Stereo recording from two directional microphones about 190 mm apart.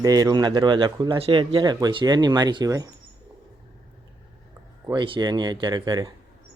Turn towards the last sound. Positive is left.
turn(degrees=-20)  # may be behind; listen again after turning